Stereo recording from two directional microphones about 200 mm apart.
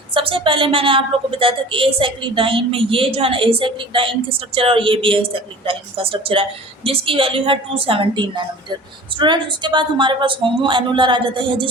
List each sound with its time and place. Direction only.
0.1 s a woman's voice: 25° right (ahead or behind)